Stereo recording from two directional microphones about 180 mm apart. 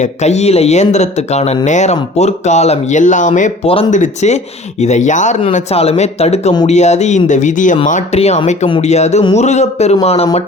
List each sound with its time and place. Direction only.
0.0 s speech: 40° left (ahead or behind)